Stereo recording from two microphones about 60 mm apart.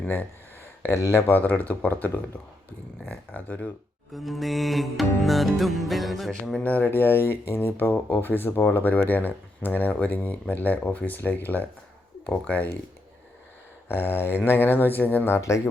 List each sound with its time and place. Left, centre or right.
0.8 s speech: left
1.3 s speech: left
4.1 s music: centre
6.6 s speech: left
13.8 s speech: left
15.4 s speech: left